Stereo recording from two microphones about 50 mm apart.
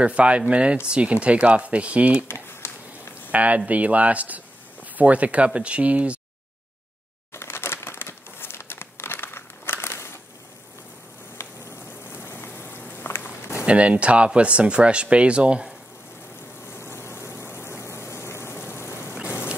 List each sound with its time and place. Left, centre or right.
0.0 s speech: right
2.2 s a sound: left
3.3 s speech: right
7.3 s crumpling: left
12.1 s a sound: left
12.9 s walk: left
13.4 s a sound: left
13.7 s speech: right
16.7 s vehicle: left